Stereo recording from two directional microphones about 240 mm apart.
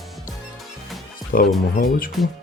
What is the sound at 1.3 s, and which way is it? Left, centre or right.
Speech, left.